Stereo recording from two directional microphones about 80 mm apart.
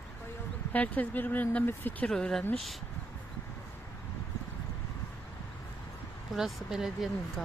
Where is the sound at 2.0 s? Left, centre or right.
Centre.